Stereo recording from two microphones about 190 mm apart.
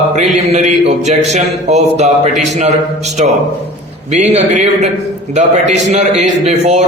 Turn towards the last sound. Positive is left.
turn(degrees=-35)  # may be behind; listen again after turning